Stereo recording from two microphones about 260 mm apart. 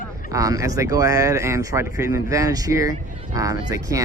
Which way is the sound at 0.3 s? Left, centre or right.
Centre.